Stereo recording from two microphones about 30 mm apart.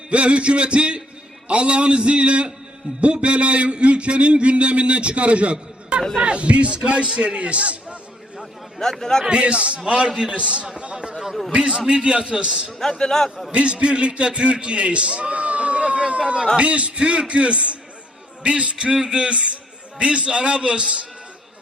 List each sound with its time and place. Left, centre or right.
0.1 s a man's voice: right
8.8 s a man's voice: centre
9.3 s a man's voice: right
10.9 s a sound: right
11.5 s a man's voice: right
12.9 s a man's voice: left
13.5 s a man's voice: right
18.9 s a man's voice: right
19.2 s a man's voice: right